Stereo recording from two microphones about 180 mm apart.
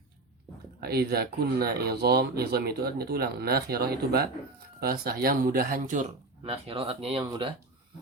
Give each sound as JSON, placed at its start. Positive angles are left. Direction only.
{"t": 0.8, "sound": "speech", "side_deg": -60}